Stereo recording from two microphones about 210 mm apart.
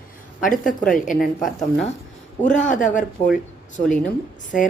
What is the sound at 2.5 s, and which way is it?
Speech, 35° left (ahead or behind).